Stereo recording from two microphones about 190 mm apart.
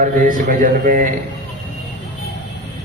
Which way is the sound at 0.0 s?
45° right (ahead or behind).